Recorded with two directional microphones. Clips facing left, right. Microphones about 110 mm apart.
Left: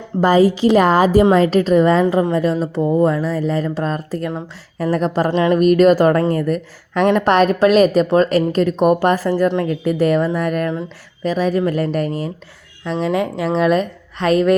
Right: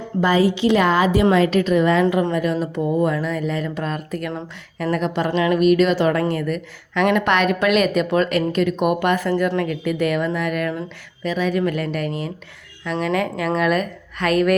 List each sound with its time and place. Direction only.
0.2 s a woman's voice: 40° left (ahead or behind)